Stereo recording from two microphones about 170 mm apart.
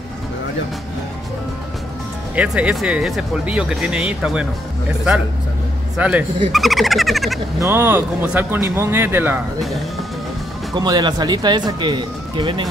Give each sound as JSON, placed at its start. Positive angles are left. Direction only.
{"t": 2.3, "sound": "speech", "side_deg": -5}
{"t": 5.9, "sound": "speech", "side_deg": -5}
{"t": 7.6, "sound": "speech", "side_deg": -10}
{"t": 10.7, "sound": "speech", "side_deg": -25}